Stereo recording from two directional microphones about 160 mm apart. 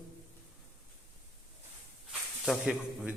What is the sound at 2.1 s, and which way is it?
Snake, centre (ahead or behind).